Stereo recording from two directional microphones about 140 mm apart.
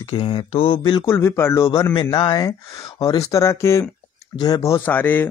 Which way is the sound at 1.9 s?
30° left (ahead or behind).